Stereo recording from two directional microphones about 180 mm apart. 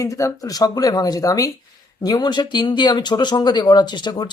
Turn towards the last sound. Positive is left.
turn(degrees=25)  # may be behind; listen again after turning